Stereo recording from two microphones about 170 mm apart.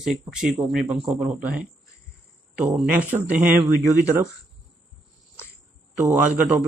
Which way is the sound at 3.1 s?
10° right (ahead or behind).